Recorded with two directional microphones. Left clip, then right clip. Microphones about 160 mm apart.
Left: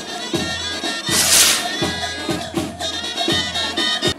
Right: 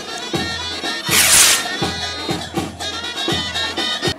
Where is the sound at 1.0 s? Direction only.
20° right (ahead or behind).